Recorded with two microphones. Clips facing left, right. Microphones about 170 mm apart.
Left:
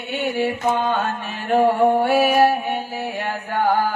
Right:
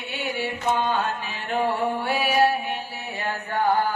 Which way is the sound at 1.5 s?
50° left (ahead or behind).